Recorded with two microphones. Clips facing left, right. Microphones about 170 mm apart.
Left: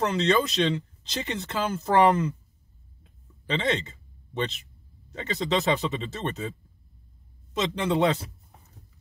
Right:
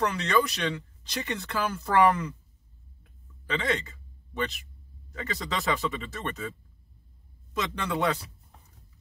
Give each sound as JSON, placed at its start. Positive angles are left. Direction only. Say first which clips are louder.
{"t": 0.0, "sound": "speech", "louder": "left 3 dB", "side_deg": 25}
{"t": 3.0, "sound": "a sound", "louder": "left 2 dB", "side_deg": 25}
{"t": 5.1, "sound": "speech", "louder": "left 6 dB", "side_deg": 25}
{"t": 7.5, "sound": "speech", "louder": "left 5 dB", "side_deg": 20}